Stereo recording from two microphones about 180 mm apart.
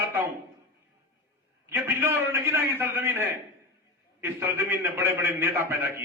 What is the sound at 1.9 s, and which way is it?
A man's voice, 15° right (ahead or behind).